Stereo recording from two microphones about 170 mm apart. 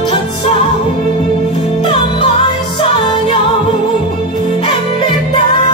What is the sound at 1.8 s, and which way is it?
Music, 30° left (ahead or behind).